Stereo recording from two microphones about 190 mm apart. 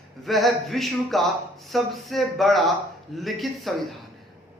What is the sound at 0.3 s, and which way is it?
A man's voice, centre (ahead or behind).